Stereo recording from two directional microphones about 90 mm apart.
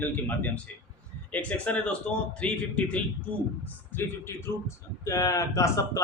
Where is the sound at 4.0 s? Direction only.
25° left (ahead or behind).